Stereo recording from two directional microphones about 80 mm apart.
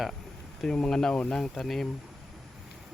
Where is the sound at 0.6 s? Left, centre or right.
Centre.